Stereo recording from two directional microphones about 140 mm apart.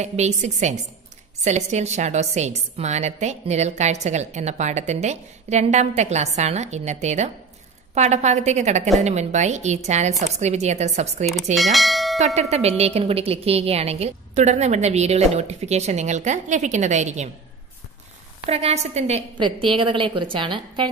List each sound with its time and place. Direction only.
0.0 s a woman's voice: 55° right (ahead or behind)
11.5 s speech: centre (ahead or behind)
12.4 s a woman's voice: 50° right (ahead or behind)
18.4 s a woman's voice: 50° right (ahead or behind)
19.3 s a woman's voice: 35° right (ahead or behind)